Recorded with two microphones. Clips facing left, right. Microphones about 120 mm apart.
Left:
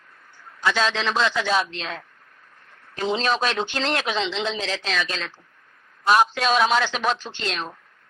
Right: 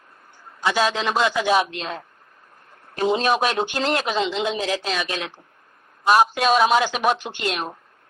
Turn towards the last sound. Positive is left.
turn(degrees=-15)  # may be behind; listen again after turning